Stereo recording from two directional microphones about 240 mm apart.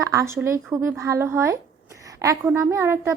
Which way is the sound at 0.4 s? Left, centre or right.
Centre.